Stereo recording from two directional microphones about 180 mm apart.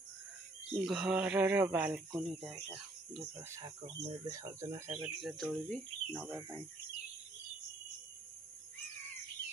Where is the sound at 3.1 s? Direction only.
10° right (ahead or behind).